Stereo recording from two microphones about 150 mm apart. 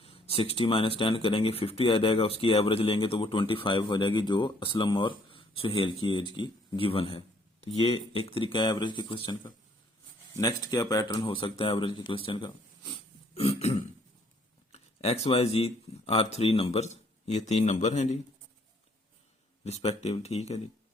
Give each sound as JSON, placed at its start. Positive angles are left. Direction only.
{"t": 0.0, "sound": "speech", "side_deg": 40}
{"t": 10.3, "sound": "speech", "side_deg": 25}
{"t": 14.7, "sound": "a sound", "side_deg": 45}
{"t": 15.3, "sound": "speech", "side_deg": 40}
{"t": 19.6, "sound": "speech", "side_deg": 45}